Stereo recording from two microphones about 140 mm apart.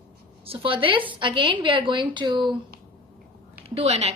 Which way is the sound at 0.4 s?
40° right (ahead or behind).